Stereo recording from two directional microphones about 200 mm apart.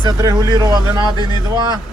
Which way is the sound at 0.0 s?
20° right (ahead or behind).